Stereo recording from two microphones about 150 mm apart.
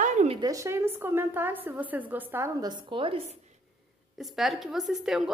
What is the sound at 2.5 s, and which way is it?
Speech, 30° right (ahead or behind).